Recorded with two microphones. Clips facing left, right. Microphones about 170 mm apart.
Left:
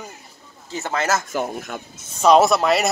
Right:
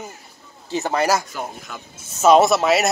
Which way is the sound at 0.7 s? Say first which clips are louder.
Right 3 dB; 15° right (ahead or behind).